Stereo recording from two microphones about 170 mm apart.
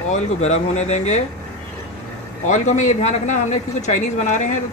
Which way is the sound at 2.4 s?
45° left (ahead or behind).